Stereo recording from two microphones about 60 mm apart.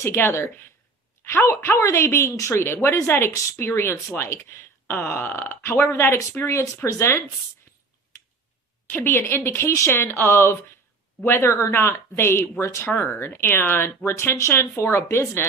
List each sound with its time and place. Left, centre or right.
0.0 s speech: left
6.4 s speech: left
8.8 s speech: left
12.9 s speech: left